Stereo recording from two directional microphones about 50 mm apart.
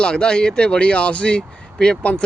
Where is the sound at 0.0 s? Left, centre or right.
Centre.